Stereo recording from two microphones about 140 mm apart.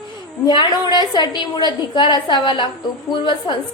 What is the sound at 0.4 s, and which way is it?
A woman's voice, 30° left (ahead or behind).